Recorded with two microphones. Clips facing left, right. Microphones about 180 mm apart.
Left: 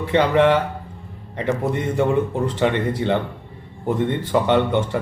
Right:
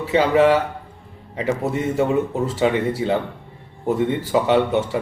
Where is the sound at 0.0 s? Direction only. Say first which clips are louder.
Right 1 dB; 5° right (ahead or behind).